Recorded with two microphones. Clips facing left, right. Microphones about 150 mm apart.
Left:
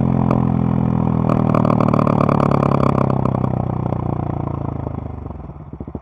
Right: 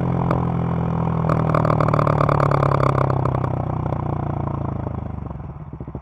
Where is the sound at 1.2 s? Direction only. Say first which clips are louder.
Left 3 dB; 15° left (ahead or behind).